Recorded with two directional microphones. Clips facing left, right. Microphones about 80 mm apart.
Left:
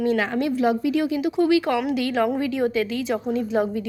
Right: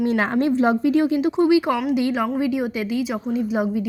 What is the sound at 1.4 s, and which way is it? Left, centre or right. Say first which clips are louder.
A woman's voice: right 1 dB; centre.